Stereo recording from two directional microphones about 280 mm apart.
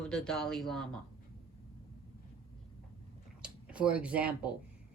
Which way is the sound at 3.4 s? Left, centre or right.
Centre.